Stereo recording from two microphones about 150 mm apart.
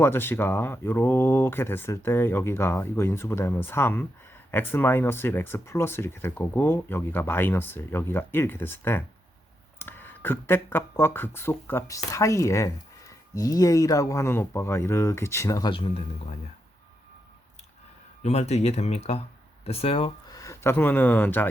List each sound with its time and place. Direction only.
0.0 s speech: 15° left (ahead or behind)
15.7 s speech: 40° left (ahead or behind)
18.2 s speech: 50° left (ahead or behind)
20.3 s speech: 20° left (ahead or behind)